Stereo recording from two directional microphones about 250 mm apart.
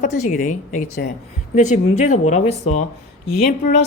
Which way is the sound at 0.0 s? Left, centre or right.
Left.